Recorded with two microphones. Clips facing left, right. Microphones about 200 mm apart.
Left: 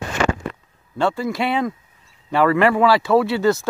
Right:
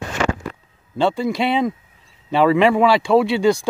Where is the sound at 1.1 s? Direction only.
20° right (ahead or behind).